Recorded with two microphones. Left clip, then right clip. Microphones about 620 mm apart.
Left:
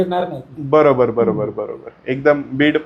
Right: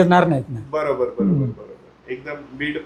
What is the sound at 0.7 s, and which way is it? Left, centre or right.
Speech, left.